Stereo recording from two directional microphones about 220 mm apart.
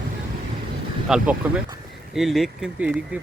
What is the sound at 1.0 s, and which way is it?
Speech, 5° right (ahead or behind).